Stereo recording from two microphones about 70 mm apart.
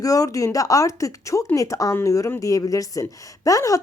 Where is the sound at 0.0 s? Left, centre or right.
Left.